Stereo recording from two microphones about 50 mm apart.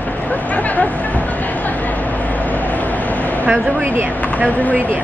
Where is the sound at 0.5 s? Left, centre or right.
Left.